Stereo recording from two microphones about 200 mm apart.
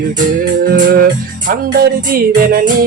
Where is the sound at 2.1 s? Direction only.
50° right (ahead or behind).